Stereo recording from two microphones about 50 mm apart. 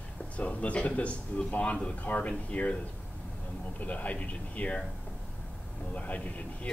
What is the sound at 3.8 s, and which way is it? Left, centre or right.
Speech, left.